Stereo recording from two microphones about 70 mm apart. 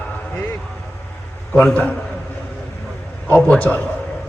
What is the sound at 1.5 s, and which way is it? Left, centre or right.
Speech, centre.